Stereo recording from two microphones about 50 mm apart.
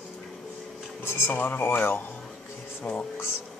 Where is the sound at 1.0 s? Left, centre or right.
Left.